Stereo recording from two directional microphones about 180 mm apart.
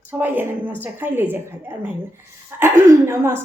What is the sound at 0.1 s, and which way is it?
A woman's voice, 10° right (ahead or behind).